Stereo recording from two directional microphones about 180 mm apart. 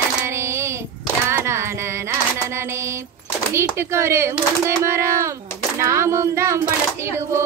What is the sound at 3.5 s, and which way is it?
Speech, 15° right (ahead or behind).